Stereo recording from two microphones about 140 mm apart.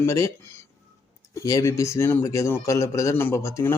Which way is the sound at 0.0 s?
20° left (ahead or behind).